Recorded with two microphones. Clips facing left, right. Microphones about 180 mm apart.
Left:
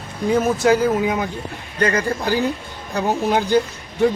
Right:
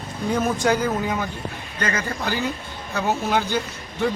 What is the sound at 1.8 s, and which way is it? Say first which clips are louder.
Speech: left 6 dB; 35° left (ahead or behind).